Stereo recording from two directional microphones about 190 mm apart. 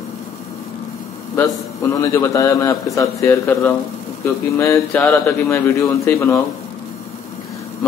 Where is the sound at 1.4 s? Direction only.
15° left (ahead or behind).